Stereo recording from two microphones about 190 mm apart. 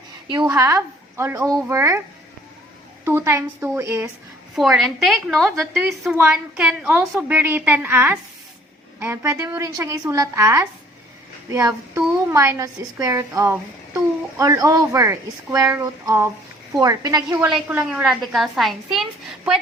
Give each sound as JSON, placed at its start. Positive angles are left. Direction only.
{"t": 0.3, "sound": "a woman's voice", "side_deg": -20}
{"t": 3.0, "sound": "a woman's voice", "side_deg": -15}
{"t": 4.5, "sound": "a woman's voice", "side_deg": 0}
{"t": 5.5, "sound": "a woman's voice", "side_deg": -10}
{"t": 17.3, "sound": "a woman's voice", "side_deg": -5}